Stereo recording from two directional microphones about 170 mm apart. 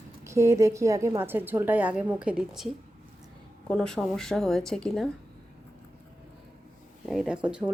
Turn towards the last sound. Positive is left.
turn(degrees=-5)  # may be behind; listen again after turning